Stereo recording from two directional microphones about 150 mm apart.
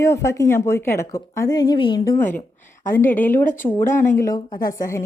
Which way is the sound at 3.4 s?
60° left (ahead or behind).